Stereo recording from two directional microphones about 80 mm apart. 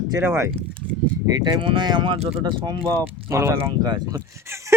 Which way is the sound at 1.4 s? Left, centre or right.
Right.